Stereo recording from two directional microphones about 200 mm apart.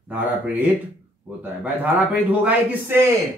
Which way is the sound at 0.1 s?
10° right (ahead or behind).